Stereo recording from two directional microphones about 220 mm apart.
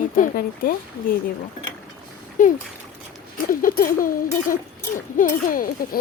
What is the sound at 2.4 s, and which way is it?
A child's voice, 35° left (ahead or behind).